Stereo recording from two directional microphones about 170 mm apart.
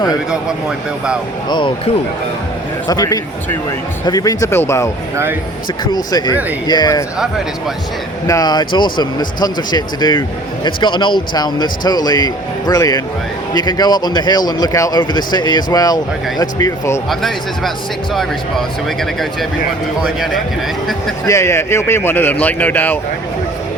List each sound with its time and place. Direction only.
1.5 s speech: 30° left (ahead or behind)
5.1 s speech: 15° right (ahead or behind)
5.8 s speech: 25° left (ahead or behind)
8.3 s speech: 25° left (ahead or behind)
17.1 s speech: centre (ahead or behind)
21.2 s speech: 15° left (ahead or behind)